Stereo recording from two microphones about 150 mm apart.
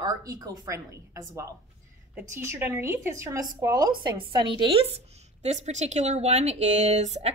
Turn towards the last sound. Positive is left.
turn(degrees=-50)  # may be behind; listen again after turning